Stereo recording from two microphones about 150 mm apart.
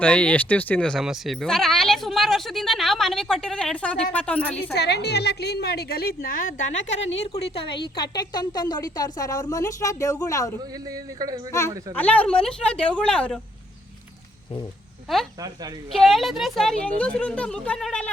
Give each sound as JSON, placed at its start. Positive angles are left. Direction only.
{"t": 0.0, "sound": "speech", "side_deg": 10}
{"t": 4.7, "sound": "a woman's voice", "side_deg": 90}
{"t": 7.5, "sound": "a woman's voice", "side_deg": 35}
{"t": 10.8, "sound": "speech", "side_deg": -25}
{"t": 11.9, "sound": "speech", "side_deg": 10}
{"t": 15.4, "sound": "speech", "side_deg": -25}
{"t": 15.9, "sound": "speech", "side_deg": 0}